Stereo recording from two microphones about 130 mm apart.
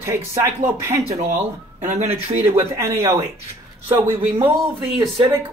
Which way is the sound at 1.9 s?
55° right (ahead or behind).